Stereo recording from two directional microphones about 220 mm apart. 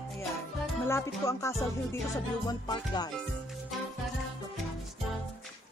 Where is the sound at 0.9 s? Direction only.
15° left (ahead or behind).